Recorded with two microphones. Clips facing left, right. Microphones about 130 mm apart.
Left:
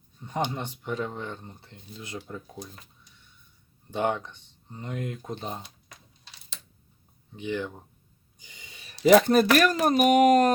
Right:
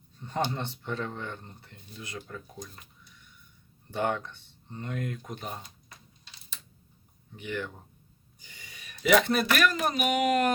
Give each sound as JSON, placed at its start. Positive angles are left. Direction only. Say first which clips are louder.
{"t": 0.2, "sound": "speech", "louder": "left 1 dB", "side_deg": 15}
{"t": 3.9, "sound": "speech", "louder": "left 2 dB", "side_deg": 20}
{"t": 7.3, "sound": "speech", "louder": "left 4 dB", "side_deg": 20}
{"t": 8.4, "sound": "a sound", "louder": "even", "side_deg": 20}
{"t": 9.0, "sound": "speech", "louder": "left 6 dB", "side_deg": 40}